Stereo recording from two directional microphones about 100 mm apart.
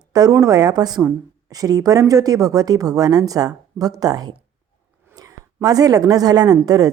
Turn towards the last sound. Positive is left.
turn(degrees=-40)  # may be behind; listen again after turning